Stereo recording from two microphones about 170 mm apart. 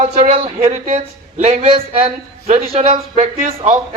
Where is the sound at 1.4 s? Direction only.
35° right (ahead or behind).